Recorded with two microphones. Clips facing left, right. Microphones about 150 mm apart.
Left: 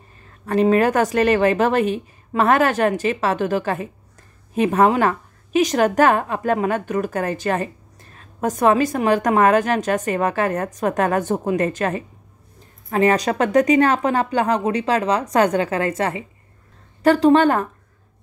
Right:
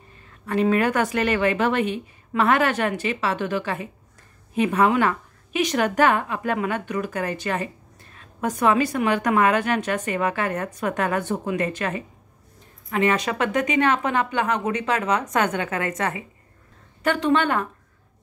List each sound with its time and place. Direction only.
0.5 s a woman's voice: 40° left (ahead or behind)